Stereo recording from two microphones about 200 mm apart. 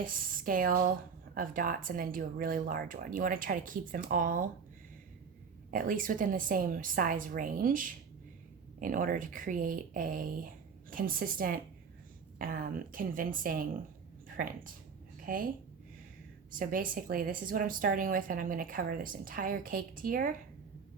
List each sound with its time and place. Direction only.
0.0 s a woman's voice: 45° right (ahead or behind)
5.7 s a woman's voice: 45° right (ahead or behind)
16.5 s a woman's voice: 45° right (ahead or behind)